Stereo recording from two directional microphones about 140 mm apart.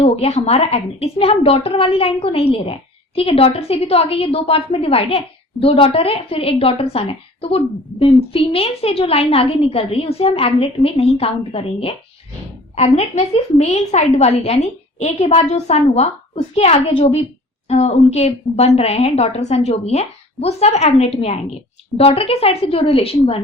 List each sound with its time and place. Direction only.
0.0 s a woman's voice: 50° left (ahead or behind)
17.7 s a woman's voice: 50° left (ahead or behind)
21.9 s a woman's voice: 45° left (ahead or behind)